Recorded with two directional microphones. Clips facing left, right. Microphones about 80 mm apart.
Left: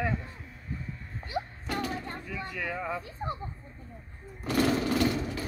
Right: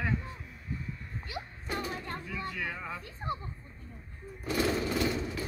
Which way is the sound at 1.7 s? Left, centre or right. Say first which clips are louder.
Even; left.